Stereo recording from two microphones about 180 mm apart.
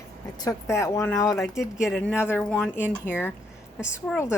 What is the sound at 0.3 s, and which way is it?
A woman's voice, 20° left (ahead or behind).